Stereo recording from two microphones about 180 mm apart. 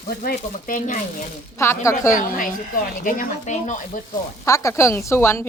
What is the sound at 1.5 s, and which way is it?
Speech, 15° left (ahead or behind).